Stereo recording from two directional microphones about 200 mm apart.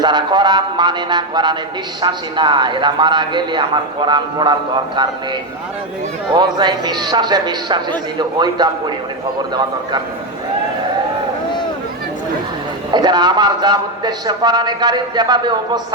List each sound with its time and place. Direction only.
0.0 s a man's voice: 20° right (ahead or behind)
6.3 s a man's voice: 20° right (ahead or behind)
12.9 s a man's voice: 20° right (ahead or behind)